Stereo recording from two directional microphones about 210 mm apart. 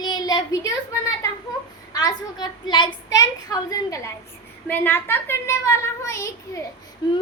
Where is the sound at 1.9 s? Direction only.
20° left (ahead or behind).